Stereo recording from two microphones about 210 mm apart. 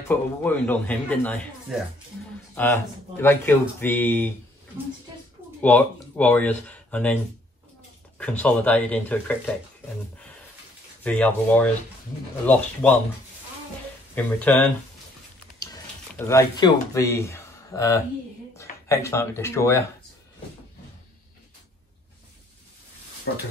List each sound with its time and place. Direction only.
0.1 s speech: 10° left (ahead or behind)
5.6 s speech: 10° left (ahead or behind)
8.2 s speech: 5° left (ahead or behind)
11.1 s speech: 5° left (ahead or behind)
14.1 s speech: 5° left (ahead or behind)
16.2 s speech: 15° left (ahead or behind)
23.3 s speech: 50° left (ahead or behind)